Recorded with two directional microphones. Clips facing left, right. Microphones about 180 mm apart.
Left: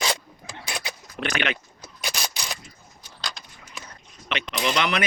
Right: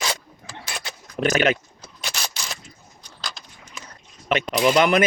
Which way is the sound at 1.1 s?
40° right (ahead or behind).